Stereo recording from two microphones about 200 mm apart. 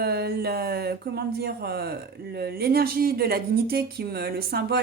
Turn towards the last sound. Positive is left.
turn(degrees=-50)  # may be behind; listen again after turning